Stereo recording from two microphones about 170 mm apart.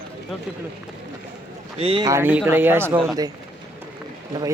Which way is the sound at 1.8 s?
35° right (ahead or behind).